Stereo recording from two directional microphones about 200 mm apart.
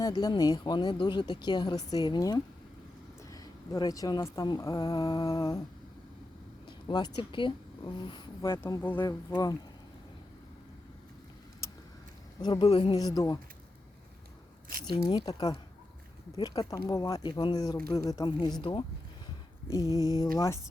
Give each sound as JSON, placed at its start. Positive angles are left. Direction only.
{"t": 0.0, "sound": "speech", "side_deg": 20}
{"t": 6.7, "sound": "speech", "side_deg": 20}
{"t": 12.4, "sound": "speech", "side_deg": 20}
{"t": 14.8, "sound": "speech", "side_deg": 20}
{"t": 19.9, "sound": "speech", "side_deg": -15}